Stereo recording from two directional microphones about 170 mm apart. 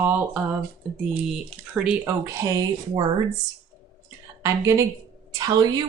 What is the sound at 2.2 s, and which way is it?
Speech, 20° right (ahead or behind).